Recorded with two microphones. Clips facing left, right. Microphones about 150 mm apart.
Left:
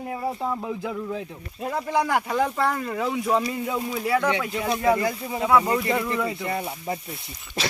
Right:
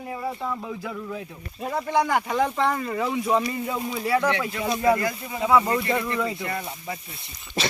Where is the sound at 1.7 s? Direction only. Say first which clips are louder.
Right 1 dB; centre (ahead or behind).